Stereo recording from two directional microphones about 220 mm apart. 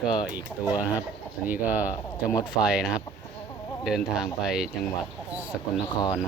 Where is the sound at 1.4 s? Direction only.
10° right (ahead or behind).